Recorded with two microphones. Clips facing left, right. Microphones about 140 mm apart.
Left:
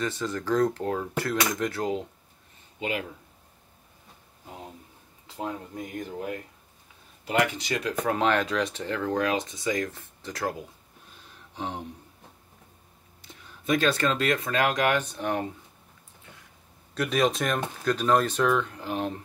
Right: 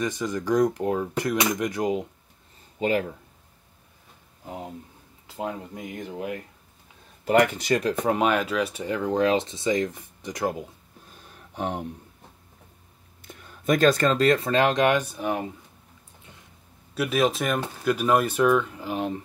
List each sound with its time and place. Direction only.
0.0 s speech: 15° right (ahead or behind)
2.8 s speech: 40° right (ahead or behind)
6.0 s speech: 15° right (ahead or behind)
7.2 s speech: 50° right (ahead or behind)
8.0 s speech: 15° right (ahead or behind)
11.1 s a sound: 55° right (ahead or behind)
13.2 s speech: 50° right (ahead or behind); by 15.0 s 20° right (ahead or behind)
15.0 s speech: 5° right (ahead or behind)
16.9 s speech: 5° right (ahead or behind)